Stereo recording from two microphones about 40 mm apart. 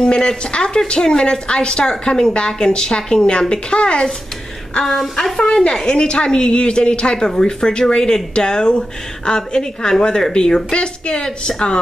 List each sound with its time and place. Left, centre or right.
0.0 s speech: left
5.8 s speech: left